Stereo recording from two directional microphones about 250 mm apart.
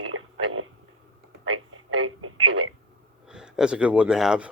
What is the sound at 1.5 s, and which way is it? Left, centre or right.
Telephone, right.